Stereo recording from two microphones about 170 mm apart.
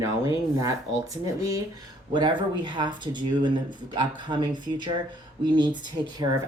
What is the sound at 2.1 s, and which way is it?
Speech, 25° right (ahead or behind).